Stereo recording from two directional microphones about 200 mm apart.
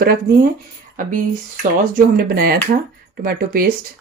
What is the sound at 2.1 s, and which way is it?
Speech, 50° right (ahead or behind).